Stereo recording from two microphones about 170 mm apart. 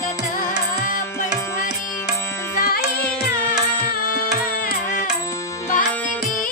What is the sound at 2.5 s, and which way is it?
Music, 60° left (ahead or behind).